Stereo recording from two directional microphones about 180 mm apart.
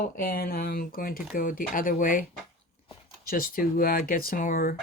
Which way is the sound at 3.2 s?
50° left (ahead or behind).